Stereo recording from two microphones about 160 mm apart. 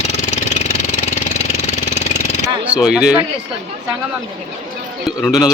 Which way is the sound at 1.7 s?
45° left (ahead or behind).